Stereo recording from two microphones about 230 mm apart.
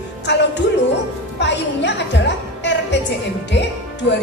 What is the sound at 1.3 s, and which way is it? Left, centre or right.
A woman's voice, left.